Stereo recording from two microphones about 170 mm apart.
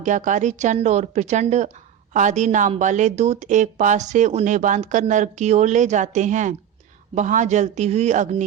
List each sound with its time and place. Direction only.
0.0 s a woman's voice: 50° right (ahead or behind)